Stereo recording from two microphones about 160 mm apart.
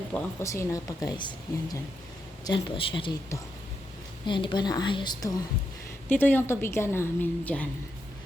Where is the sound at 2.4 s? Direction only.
30° left (ahead or behind).